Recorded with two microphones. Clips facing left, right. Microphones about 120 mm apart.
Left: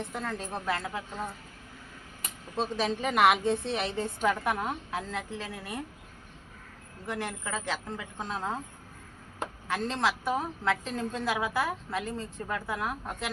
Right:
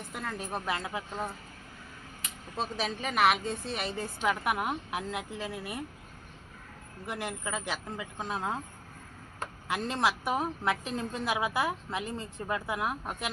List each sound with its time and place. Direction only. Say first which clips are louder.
0.1 s a woman's voice: left 1 dB; 10° right (ahead or behind)
2.6 s a woman's voice: left 4 dB; 5° right (ahead or behind)
4.3 s a woman's voice: right 1 dB; 15° right (ahead or behind)
7.1 s a woman's voice: left 1 dB; 15° right (ahead or behind)
9.6 s a woman's voice: even; 15° right (ahead or behind)